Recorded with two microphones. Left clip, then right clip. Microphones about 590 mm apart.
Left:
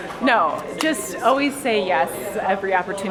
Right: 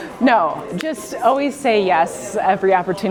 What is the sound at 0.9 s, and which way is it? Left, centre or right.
A woman's voice, right.